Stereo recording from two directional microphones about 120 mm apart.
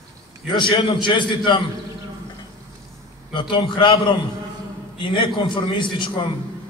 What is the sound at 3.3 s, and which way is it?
A man's voice, 40° left (ahead or behind).